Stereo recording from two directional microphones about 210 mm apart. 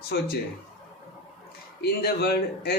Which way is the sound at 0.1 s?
50° left (ahead or behind).